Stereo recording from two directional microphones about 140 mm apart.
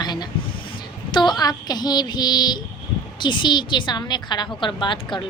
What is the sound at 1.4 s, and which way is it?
A woman's voice, 30° left (ahead or behind).